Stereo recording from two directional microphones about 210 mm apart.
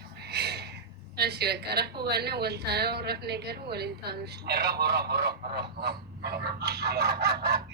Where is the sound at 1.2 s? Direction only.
50° right (ahead or behind).